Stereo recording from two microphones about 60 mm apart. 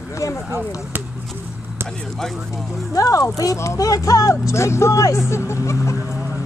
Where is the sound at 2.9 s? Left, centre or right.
Left.